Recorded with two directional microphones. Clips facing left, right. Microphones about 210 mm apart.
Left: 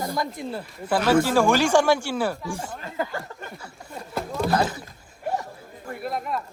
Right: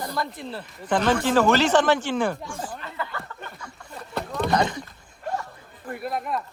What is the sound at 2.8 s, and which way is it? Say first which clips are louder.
Speech: left 4 dB; 40° left (ahead or behind).